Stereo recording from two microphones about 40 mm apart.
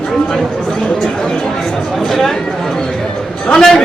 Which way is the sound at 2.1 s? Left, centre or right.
Centre.